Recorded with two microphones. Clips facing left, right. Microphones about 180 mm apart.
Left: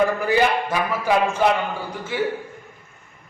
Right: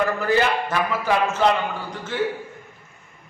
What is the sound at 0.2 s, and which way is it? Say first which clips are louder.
A man's voice: left 1 dB; 15° left (ahead or behind).